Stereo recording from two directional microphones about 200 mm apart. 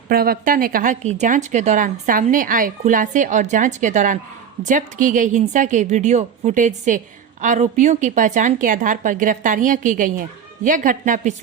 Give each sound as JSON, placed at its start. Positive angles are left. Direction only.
{"t": 0.1, "sound": "speech", "side_deg": -50}